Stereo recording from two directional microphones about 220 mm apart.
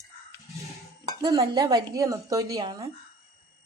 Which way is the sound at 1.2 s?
15° right (ahead or behind).